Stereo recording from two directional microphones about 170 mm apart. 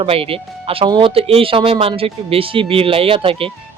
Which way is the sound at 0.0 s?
35° right (ahead or behind).